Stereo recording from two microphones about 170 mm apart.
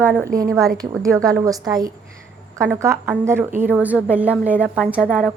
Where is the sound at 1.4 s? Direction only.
20° right (ahead or behind).